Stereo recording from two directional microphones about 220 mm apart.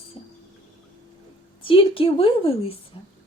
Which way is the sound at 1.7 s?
25° left (ahead or behind).